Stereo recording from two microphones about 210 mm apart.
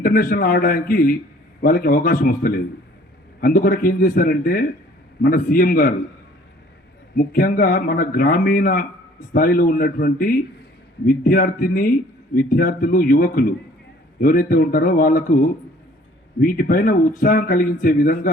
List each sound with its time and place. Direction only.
0.0 s speech: 45° left (ahead or behind)
7.2 s speech: 45° left (ahead or behind)